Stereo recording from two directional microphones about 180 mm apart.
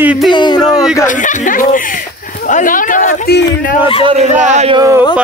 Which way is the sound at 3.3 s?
65° left (ahead or behind).